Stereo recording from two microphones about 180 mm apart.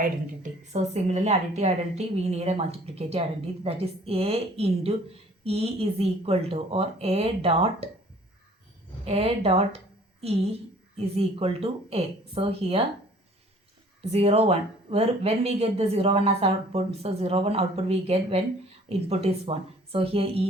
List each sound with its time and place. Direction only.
0.7 s speech: 40° right (ahead or behind)
9.0 s a woman's voice: 35° right (ahead or behind)
14.1 s speech: 35° right (ahead or behind)